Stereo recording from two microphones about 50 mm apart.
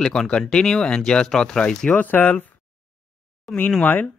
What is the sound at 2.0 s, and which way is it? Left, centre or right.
Speech, left.